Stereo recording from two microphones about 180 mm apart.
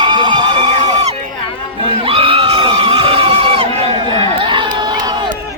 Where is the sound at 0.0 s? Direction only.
25° right (ahead or behind).